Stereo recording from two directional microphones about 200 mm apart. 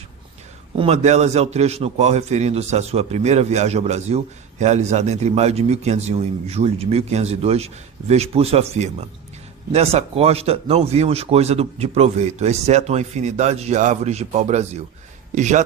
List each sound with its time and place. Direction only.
0.8 s a man's voice: 35° right (ahead or behind)